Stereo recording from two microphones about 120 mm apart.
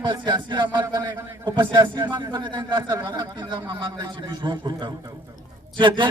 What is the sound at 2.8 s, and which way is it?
Speech, 20° right (ahead or behind).